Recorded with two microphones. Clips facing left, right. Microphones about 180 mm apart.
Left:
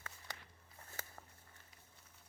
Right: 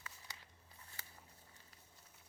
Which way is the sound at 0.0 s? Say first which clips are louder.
Left 4 dB; 55° left (ahead or behind).